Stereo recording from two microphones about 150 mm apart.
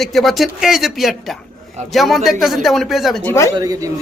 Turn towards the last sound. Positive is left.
turn(degrees=-25)  # may be behind; listen again after turning